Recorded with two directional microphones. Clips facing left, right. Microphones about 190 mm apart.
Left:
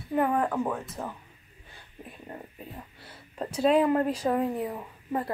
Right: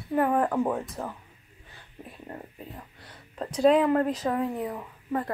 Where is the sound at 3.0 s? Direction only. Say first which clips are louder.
Even; 10° left (ahead or behind).